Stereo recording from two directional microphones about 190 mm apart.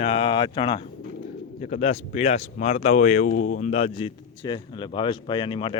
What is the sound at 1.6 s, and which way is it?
Speech, 40° left (ahead or behind).